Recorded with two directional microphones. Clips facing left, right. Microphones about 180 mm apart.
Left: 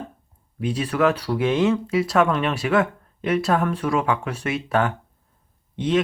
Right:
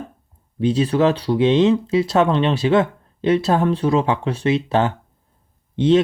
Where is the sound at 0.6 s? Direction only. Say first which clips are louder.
Right 4 dB; 25° right (ahead or behind).